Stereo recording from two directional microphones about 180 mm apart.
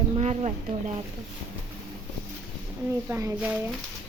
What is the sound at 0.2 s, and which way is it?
Speech, 40° right (ahead or behind).